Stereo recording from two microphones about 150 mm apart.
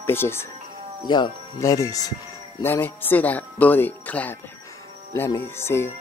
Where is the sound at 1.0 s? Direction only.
30° left (ahead or behind).